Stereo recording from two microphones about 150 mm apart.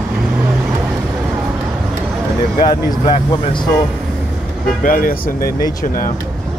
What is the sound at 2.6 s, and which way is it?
Speech, 30° left (ahead or behind).